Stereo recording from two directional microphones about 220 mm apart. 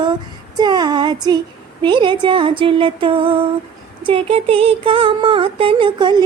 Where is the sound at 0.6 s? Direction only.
20° right (ahead or behind).